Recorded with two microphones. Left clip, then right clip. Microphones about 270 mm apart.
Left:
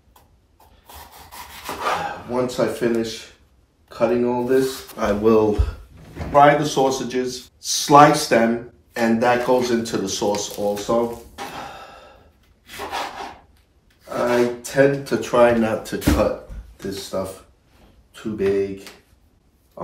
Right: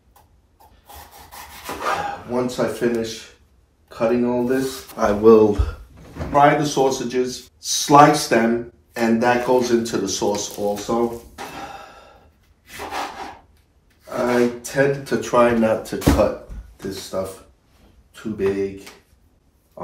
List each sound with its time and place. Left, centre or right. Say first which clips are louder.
0.8 s rub: even; centre
3.9 s speech: even; centre
5.2 s speech: right 5 dB; right
6.3 s speech: left 1 dB; centre
12.6 s rub: even; centre
14.0 s a sound: even; centre
16.7 s speech: even; centre